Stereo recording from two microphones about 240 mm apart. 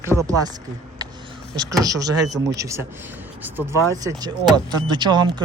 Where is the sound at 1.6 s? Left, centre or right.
Centre.